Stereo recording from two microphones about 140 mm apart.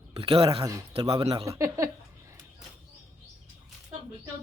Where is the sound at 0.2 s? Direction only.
40° right (ahead or behind).